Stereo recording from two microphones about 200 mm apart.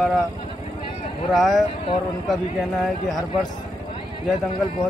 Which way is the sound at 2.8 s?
Centre (ahead or behind).